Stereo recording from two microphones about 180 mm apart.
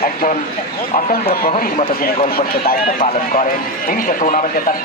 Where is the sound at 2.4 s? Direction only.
55° left (ahead or behind).